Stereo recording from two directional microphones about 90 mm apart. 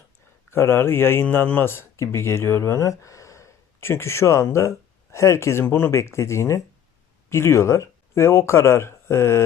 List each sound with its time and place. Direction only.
0.5 s speech: 30° left (ahead or behind)